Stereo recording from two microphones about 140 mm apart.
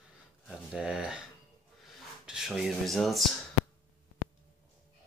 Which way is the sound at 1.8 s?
Centre (ahead or behind).